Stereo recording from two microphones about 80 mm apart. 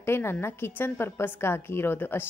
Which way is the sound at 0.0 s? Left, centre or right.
Left.